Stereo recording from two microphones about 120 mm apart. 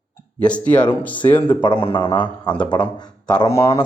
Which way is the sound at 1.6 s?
45° left (ahead or behind).